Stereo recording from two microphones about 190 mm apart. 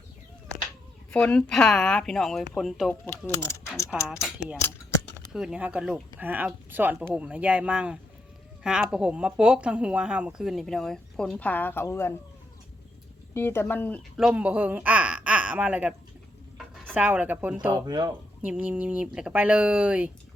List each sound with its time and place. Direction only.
1.1 s speech: 5° left (ahead or behind)
3.1 s speech: 15° left (ahead or behind)
3.8 s speech: 5° right (ahead or behind)
5.3 s speech: 5° right (ahead or behind); by 12.1 s 15° left (ahead or behind)
13.3 s speech: 10° left (ahead or behind)
14.2 s speech: 5° right (ahead or behind)
17.7 s speech: 20° right (ahead or behind)
18.4 s speech: 5° right (ahead or behind)